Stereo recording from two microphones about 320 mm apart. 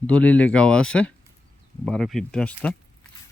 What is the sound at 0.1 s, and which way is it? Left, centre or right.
Speech, centre.